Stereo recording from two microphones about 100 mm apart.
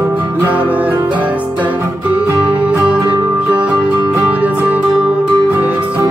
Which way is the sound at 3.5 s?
15° right (ahead or behind).